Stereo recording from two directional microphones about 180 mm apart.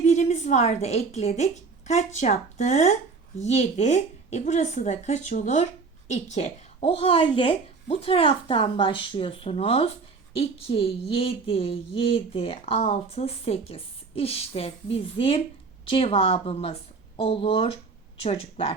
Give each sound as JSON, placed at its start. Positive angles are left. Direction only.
{"t": 0.0, "sound": "a woman's voice", "side_deg": 40}